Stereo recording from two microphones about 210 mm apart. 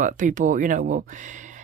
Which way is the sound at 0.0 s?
40° right (ahead or behind).